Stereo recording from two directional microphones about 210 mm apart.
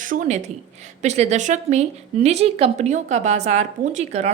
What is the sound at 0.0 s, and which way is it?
A woman's voice, 40° right (ahead or behind).